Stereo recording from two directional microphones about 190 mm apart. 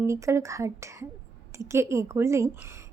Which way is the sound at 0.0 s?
15° right (ahead or behind).